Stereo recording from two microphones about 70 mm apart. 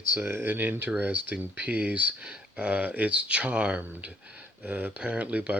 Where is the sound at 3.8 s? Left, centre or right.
Right.